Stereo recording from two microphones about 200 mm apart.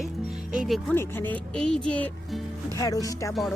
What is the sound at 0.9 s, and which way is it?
Speech, 10° left (ahead or behind).